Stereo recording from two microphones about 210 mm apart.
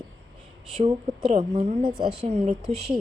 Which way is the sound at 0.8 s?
30° right (ahead or behind).